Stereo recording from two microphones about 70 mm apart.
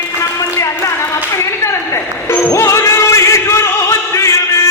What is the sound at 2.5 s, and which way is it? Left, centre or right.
Music, left.